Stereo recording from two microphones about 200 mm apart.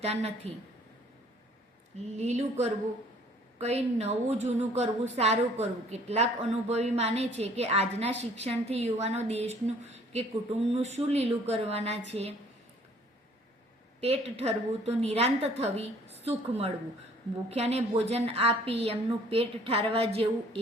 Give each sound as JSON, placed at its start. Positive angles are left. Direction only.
{"t": 0.0, "sound": "a woman's voice", "side_deg": -30}
{"t": 2.1, "sound": "a woman's voice", "side_deg": -35}
{"t": 14.0, "sound": "a woman's voice", "side_deg": -30}